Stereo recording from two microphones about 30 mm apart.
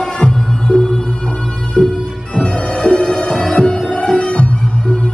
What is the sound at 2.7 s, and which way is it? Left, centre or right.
Music, left.